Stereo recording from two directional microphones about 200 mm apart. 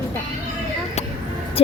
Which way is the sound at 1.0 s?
35° left (ahead or behind).